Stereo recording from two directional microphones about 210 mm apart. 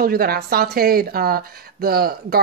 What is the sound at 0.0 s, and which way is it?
Speech, 45° right (ahead or behind).